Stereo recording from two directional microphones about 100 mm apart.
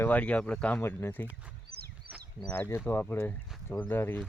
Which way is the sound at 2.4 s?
20° left (ahead or behind).